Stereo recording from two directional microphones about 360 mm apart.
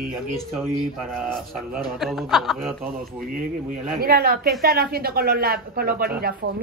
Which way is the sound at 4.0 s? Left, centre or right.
Right.